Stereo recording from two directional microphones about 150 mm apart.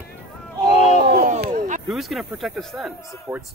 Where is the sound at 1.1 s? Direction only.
75° right (ahead or behind).